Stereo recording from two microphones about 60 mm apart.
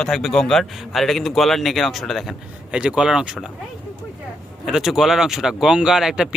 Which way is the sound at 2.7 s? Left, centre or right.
Centre.